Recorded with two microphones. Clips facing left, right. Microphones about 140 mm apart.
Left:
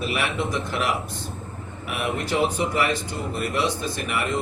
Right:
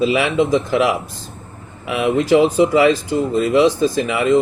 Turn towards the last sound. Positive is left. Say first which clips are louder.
# right 11 dB
turn(degrees=-90)